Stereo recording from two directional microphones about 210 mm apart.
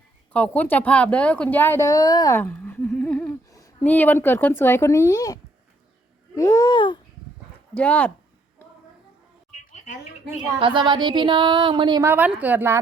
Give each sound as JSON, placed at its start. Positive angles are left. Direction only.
{"t": 0.3, "sound": "speech", "side_deg": 5}
{"t": 6.3, "sound": "babbling", "side_deg": 15}
{"t": 7.7, "sound": "speech", "side_deg": 5}
{"t": 10.6, "sound": "a woman's voice", "side_deg": -20}